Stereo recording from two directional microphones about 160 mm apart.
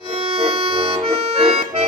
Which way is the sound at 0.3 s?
35° right (ahead or behind).